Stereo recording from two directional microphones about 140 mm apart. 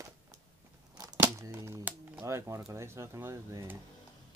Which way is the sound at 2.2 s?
20° right (ahead or behind).